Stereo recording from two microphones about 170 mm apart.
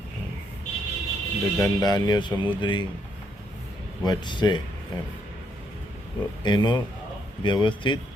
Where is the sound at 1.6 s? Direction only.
20° left (ahead or behind).